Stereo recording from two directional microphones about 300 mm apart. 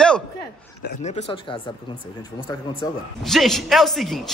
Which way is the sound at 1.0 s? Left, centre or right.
Left.